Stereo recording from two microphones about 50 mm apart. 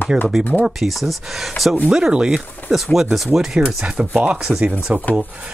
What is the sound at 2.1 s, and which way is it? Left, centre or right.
Speech, right.